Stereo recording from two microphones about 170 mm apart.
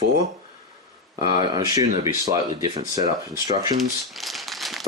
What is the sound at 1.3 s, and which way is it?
Speech, 25° right (ahead or behind).